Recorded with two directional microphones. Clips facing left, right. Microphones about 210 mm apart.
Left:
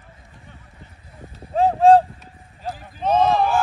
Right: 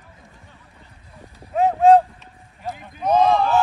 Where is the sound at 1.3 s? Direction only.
30° left (ahead or behind).